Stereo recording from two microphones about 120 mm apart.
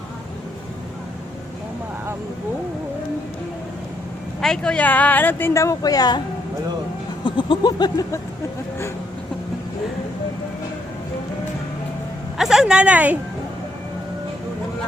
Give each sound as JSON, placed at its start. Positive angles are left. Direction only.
{"t": 4.4, "sound": "speech", "side_deg": 5}
{"t": 7.3, "sound": "a sound", "side_deg": 45}
{"t": 12.4, "sound": "a woman's voice", "side_deg": -5}